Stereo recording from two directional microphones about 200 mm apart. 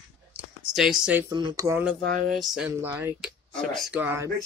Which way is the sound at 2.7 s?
10° right (ahead or behind).